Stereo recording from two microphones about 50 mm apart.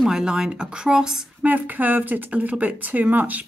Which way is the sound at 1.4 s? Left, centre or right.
Right.